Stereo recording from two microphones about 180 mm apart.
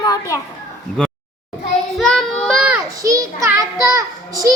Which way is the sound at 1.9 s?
Centre (ahead or behind).